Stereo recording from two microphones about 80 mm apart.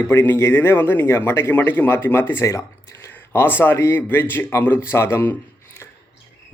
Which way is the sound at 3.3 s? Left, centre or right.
Left.